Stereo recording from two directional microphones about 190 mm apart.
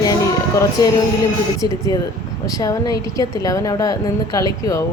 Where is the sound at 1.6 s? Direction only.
20° left (ahead or behind).